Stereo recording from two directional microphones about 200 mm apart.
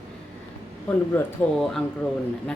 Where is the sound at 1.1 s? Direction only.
10° left (ahead or behind).